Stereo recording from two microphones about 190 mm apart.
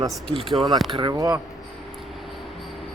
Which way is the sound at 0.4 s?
Centre (ahead or behind).